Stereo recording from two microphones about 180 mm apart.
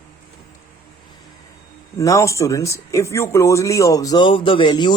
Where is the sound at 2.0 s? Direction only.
15° left (ahead or behind).